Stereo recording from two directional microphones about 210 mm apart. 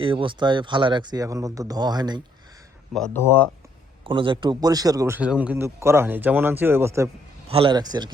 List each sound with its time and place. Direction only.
0.0 s speech: 25° right (ahead or behind)
2.9 s speech: 5° left (ahead or behind)
4.0 s a man's voice: 25° right (ahead or behind)
7.4 s speech: 25° right (ahead or behind)